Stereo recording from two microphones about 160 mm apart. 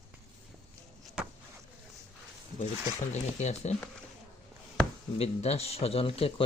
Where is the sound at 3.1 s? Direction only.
45° left (ahead or behind).